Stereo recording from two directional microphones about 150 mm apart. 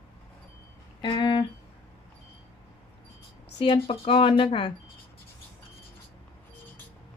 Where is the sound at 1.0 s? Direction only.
30° left (ahead or behind).